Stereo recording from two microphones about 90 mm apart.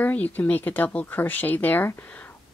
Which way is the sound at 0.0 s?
20° left (ahead or behind).